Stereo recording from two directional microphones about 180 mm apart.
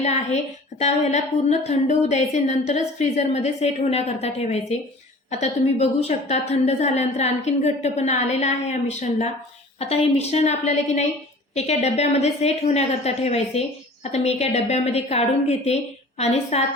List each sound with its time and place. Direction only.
0.0 s a woman's voice: 40° left (ahead or behind)
5.3 s a woman's voice: 40° left (ahead or behind)